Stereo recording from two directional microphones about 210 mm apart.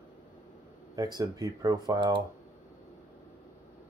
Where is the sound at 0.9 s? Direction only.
20° right (ahead or behind).